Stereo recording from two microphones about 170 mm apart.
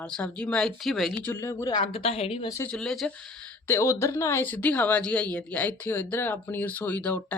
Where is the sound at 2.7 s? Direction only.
5° left (ahead or behind).